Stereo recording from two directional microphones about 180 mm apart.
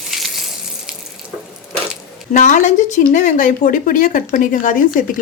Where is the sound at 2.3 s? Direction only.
45° left (ahead or behind).